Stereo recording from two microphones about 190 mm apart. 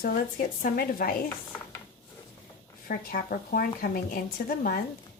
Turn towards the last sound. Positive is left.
turn(degrees=50)  # may be behind; listen again after turning